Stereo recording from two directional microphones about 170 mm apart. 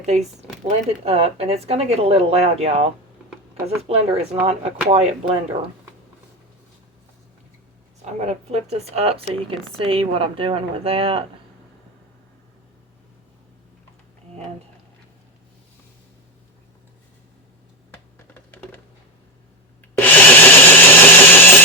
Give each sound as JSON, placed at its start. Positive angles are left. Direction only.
{"t": 0.0, "sound": "speech", "side_deg": -40}
{"t": 8.0, "sound": "speech", "side_deg": -40}
{"t": 17.9, "sound": "computer keyboard", "side_deg": 10}
{"t": 20.0, "sound": "wood", "side_deg": 10}